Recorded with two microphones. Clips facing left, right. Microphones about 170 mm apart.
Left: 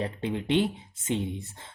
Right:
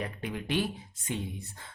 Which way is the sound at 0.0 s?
25° left (ahead or behind).